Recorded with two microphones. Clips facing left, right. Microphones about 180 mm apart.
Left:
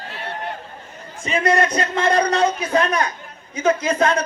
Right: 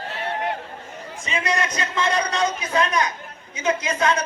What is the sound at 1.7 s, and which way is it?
A man's voice, 35° left (ahead or behind).